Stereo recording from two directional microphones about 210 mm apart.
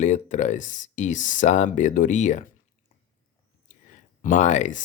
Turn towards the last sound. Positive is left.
turn(degrees=35)  # may be behind; listen again after turning